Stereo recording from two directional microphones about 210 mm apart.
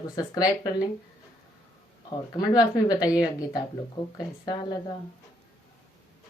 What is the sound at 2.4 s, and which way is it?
Speech, 20° left (ahead or behind).